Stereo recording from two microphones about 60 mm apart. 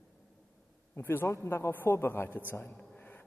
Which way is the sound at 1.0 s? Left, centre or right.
Left.